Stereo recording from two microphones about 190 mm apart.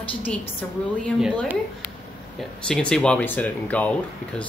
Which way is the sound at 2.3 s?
5° left (ahead or behind).